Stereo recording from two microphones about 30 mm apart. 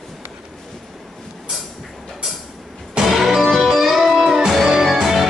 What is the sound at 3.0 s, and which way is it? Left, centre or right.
Music, centre.